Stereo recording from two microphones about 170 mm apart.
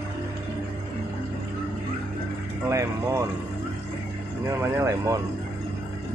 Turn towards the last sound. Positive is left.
turn(degrees=-15)  # may be behind; listen again after turning